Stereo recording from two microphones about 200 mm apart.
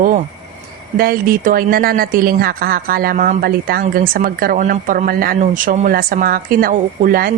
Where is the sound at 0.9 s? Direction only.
45° right (ahead or behind).